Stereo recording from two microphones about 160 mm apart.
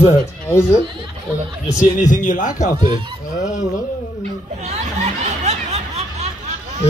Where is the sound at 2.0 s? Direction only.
50° left (ahead or behind).